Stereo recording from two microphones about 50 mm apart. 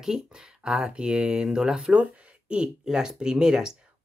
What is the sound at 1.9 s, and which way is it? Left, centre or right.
Speech, right.